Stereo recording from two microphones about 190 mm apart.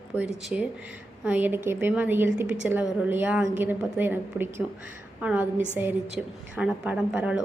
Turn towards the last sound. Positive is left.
turn(degrees=-5)  # may be behind; listen again after turning